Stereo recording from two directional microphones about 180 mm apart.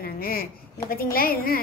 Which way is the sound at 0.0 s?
55° left (ahead or behind).